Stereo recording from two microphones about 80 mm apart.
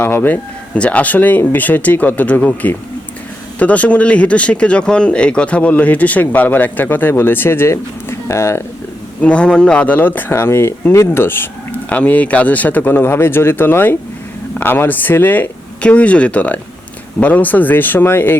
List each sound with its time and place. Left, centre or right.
0.0 s speech: left
0.7 s speech: centre; by 8.6 s left
9.2 s speech: centre